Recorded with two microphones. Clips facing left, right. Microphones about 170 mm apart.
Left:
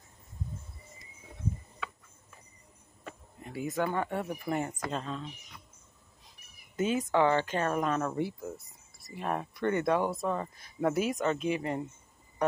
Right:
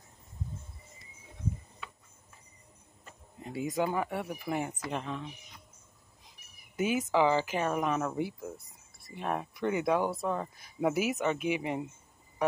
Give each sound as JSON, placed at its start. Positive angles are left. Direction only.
{"t": 3.3, "sound": "speech", "side_deg": -25}
{"t": 4.9, "sound": "speech", "side_deg": -15}
{"t": 6.8, "sound": "speech", "side_deg": -10}